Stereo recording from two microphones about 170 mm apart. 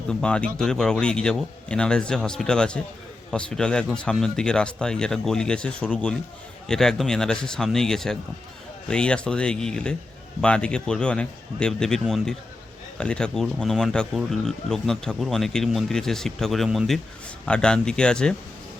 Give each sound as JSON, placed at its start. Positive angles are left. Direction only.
{"t": 0.1, "sound": "speech", "side_deg": 5}